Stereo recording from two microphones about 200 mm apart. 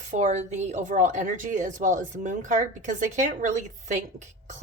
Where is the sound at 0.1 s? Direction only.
35° right (ahead or behind).